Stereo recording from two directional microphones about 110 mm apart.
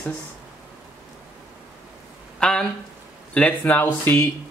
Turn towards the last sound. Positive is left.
turn(degrees=20)  # may be behind; listen again after turning